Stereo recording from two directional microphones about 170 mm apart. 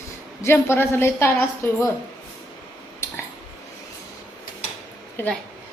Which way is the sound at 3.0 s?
15° left (ahead or behind).